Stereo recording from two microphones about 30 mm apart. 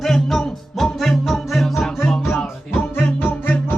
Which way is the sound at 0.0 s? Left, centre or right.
Centre.